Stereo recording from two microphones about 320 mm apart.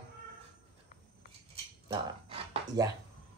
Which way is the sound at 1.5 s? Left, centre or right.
Centre.